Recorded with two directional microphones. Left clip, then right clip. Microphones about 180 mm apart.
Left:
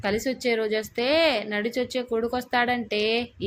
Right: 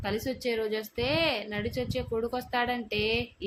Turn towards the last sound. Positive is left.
turn(degrees=20)  # may be behind; listen again after turning